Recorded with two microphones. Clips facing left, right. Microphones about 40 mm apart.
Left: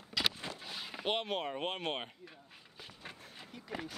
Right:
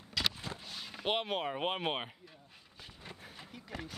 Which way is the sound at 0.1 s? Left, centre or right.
Centre.